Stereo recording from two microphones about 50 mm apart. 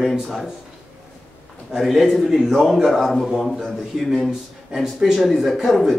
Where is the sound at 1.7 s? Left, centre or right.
Centre.